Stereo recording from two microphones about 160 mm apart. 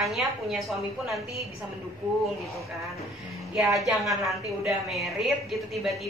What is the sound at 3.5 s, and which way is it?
A woman's voice, centre (ahead or behind).